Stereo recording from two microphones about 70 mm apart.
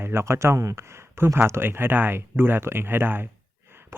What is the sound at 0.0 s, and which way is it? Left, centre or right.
Speech, right.